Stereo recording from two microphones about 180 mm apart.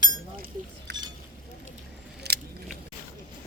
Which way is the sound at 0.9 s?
70° right (ahead or behind).